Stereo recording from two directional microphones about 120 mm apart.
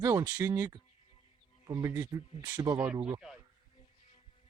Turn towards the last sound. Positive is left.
turn(degrees=-5)  # may be behind; listen again after turning